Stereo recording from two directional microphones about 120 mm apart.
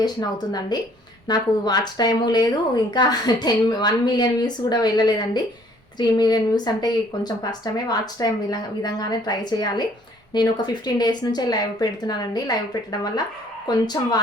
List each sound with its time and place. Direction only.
0.0 s speech: 35° left (ahead or behind)
13.7 s speech: 35° left (ahead or behind)